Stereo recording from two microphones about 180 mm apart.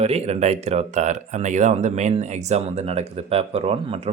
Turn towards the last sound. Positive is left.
turn(degrees=-30)  # may be behind; listen again after turning